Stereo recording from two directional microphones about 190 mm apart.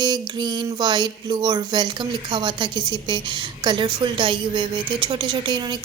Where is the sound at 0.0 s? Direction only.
20° right (ahead or behind).